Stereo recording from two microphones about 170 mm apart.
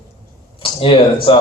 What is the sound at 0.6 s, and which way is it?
Speech, 30° left (ahead or behind).